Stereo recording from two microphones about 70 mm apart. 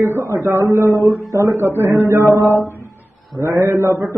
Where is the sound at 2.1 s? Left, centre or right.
Right.